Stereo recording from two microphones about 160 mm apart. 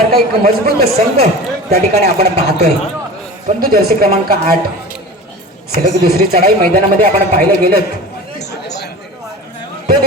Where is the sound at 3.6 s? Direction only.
70° right (ahead or behind).